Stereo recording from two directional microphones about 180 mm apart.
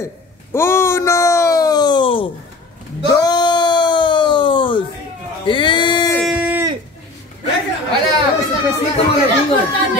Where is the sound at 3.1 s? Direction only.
20° left (ahead or behind).